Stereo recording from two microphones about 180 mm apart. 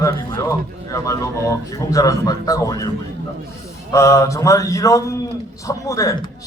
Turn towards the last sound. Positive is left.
turn(degrees=20)  # may be behind; listen again after turning